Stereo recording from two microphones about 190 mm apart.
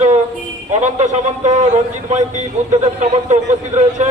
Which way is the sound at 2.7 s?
35° right (ahead or behind).